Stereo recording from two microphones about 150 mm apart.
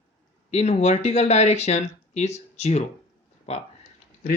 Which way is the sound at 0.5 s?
45° left (ahead or behind).